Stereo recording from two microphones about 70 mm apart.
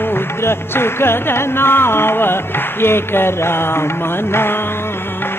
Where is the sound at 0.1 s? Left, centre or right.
Left.